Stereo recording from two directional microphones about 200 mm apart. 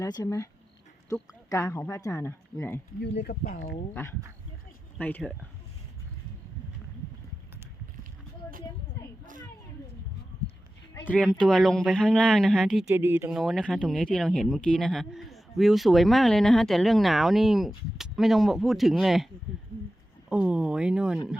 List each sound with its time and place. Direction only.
0.0 s speech: 20° left (ahead or behind)
3.0 s speech: 55° left (ahead or behind)
4.9 s speech: 10° left (ahead or behind)
10.9 s speech: 10° left (ahead or behind)
12.9 s speech: 10° right (ahead or behind)
13.4 s speech: 5° left (ahead or behind)
20.3 s speech: 5° right (ahead or behind)